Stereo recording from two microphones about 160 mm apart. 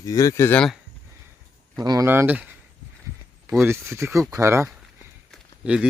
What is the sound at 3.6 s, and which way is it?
Speech, 15° right (ahead or behind).